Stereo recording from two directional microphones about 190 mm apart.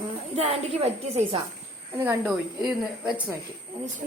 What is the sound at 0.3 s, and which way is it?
A woman's voice, 30° right (ahead or behind).